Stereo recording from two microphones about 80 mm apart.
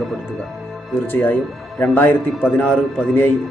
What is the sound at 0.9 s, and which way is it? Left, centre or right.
A man's voice, left.